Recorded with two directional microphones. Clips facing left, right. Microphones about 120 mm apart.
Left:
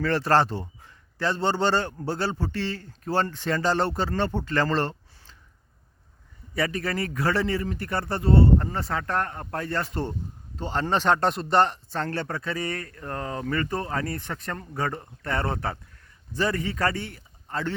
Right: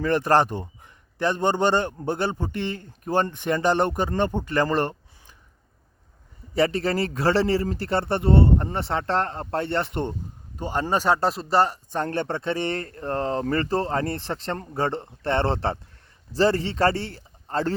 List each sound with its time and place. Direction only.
0.0 s a man's voice: 15° right (ahead or behind)
6.5 s a man's voice: 25° right (ahead or behind); by 11.8 s 5° right (ahead or behind)
11.9 s a man's voice: 20° right (ahead or behind)